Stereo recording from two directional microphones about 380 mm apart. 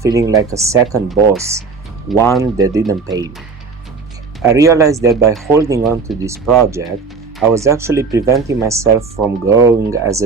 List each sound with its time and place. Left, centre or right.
0.0 s speech: centre
2.4 s speech: centre
4.4 s speech: centre